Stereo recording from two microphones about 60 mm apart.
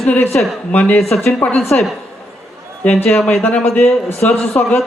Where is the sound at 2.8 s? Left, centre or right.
Left.